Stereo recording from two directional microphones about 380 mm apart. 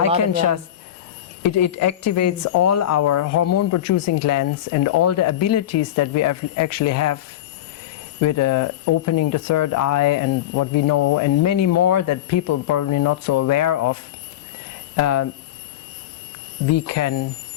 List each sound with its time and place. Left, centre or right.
1.4 s speech: left
8.2 s speech: left
16.6 s speech: left